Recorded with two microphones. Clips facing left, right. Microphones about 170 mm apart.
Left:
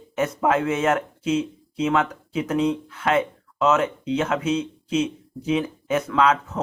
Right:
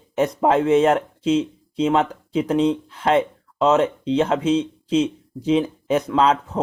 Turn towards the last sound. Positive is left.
turn(degrees=-30)  # may be behind; listen again after turning